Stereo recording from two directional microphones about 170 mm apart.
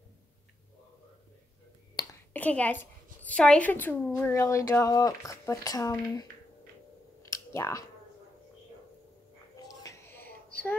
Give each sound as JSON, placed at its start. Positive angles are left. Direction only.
{"t": 2.3, "sound": "a woman's voice", "side_deg": 10}
{"t": 7.2, "sound": "clicking", "side_deg": 15}
{"t": 9.6, "sound": "a sound", "side_deg": 20}